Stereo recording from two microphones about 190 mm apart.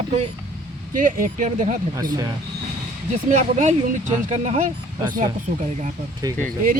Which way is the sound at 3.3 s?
40° right (ahead or behind).